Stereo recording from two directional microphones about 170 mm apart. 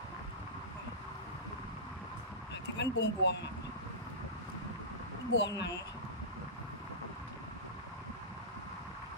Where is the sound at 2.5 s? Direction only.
90° left.